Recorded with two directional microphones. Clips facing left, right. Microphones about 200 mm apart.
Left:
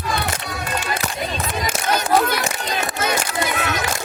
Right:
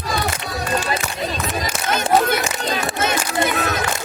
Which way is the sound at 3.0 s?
25° right (ahead or behind).